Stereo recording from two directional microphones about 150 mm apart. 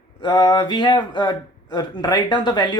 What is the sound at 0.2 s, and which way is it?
Speech, 30° left (ahead or behind).